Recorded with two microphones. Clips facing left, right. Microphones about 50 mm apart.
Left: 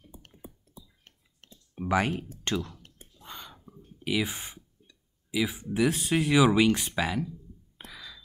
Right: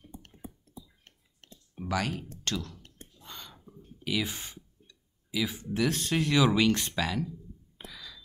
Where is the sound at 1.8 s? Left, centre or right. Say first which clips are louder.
Left 5 dB; left.